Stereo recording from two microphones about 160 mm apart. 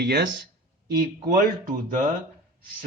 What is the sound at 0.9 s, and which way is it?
Speech, 70° right (ahead or behind).